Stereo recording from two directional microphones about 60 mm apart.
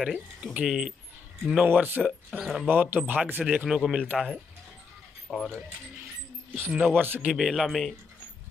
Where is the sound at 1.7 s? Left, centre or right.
Right.